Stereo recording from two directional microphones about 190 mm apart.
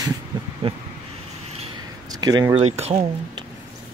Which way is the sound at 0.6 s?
30° right (ahead or behind).